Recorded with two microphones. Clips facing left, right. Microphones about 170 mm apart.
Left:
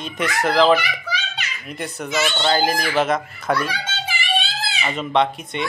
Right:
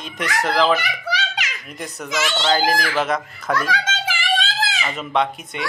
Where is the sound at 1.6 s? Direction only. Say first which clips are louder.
Left 3 dB; centre (ahead or behind).